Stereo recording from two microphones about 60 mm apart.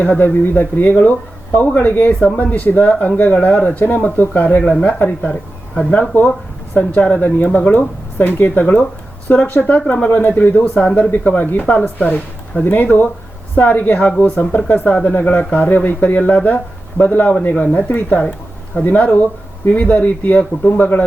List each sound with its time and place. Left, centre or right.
0.0 s speech: left